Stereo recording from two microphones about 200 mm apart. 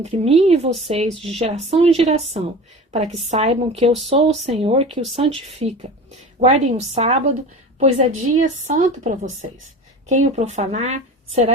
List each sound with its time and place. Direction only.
0.0 s speech: 35° right (ahead or behind)